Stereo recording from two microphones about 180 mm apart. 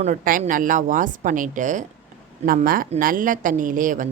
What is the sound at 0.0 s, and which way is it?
A woman's voice, 50° right (ahead or behind).